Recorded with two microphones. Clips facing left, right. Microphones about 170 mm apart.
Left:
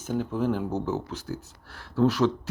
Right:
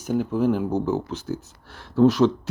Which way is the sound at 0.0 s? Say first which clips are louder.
Right 5 dB; 10° right (ahead or behind).